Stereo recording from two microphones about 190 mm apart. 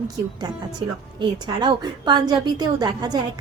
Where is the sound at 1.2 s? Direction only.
25° right (ahead or behind).